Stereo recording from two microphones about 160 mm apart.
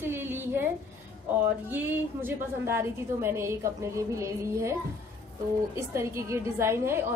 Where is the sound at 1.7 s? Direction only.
10° right (ahead or behind).